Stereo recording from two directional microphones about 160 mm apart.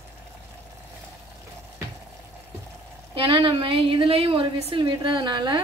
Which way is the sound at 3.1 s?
35° right (ahead or behind).